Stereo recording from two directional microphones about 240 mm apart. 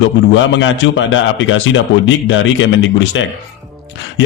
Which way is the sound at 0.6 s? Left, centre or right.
Left.